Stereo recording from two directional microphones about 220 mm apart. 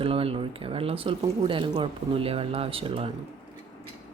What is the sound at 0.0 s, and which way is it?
Speech, 25° right (ahead or behind).